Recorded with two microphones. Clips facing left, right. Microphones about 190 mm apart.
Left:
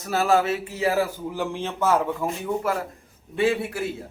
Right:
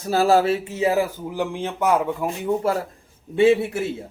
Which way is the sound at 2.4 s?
30° right (ahead or behind).